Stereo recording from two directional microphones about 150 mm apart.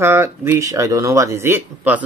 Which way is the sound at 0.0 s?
15° right (ahead or behind).